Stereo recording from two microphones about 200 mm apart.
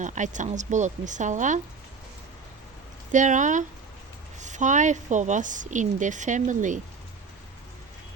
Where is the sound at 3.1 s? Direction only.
40° right (ahead or behind).